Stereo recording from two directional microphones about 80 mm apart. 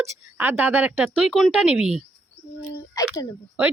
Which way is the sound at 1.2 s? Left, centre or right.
Centre.